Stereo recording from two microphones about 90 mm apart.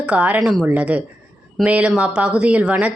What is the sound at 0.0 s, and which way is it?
Speech, 15° right (ahead or behind).